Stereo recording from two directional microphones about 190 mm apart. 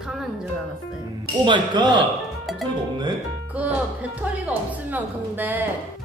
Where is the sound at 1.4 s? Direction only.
25° right (ahead or behind).